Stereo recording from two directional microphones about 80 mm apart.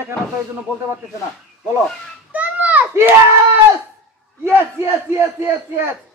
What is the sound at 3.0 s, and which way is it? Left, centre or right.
Crowd, right.